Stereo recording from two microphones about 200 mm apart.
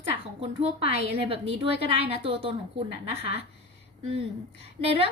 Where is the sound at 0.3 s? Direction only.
30° right (ahead or behind).